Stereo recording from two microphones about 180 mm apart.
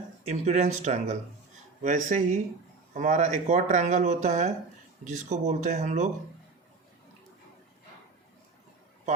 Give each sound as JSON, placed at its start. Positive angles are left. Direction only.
{"t": 0.3, "sound": "speech", "side_deg": -40}